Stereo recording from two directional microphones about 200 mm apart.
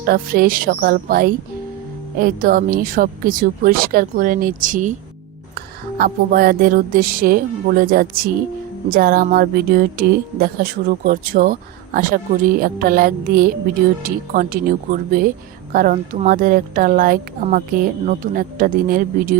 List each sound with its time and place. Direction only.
0.0 s speech: 45° right (ahead or behind)
6.0 s speech: 45° right (ahead or behind)